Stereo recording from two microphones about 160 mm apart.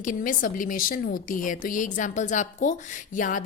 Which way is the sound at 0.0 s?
55° left (ahead or behind).